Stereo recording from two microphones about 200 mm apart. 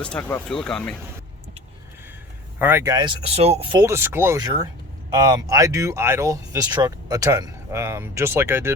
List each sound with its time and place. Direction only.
0.0 s speech: 5° left (ahead or behind)
2.6 s speech: 10° right (ahead or behind)